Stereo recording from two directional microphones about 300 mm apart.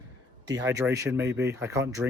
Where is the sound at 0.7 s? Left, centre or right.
Centre.